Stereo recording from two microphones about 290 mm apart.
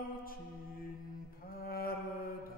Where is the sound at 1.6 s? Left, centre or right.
Left.